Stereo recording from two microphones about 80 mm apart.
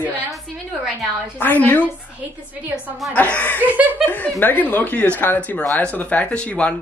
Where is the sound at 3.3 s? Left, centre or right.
Left.